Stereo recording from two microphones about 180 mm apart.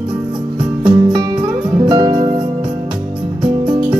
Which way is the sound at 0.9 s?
25° right (ahead or behind).